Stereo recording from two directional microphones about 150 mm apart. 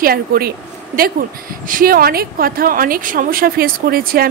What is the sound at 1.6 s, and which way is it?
A woman's voice, 70° right (ahead or behind).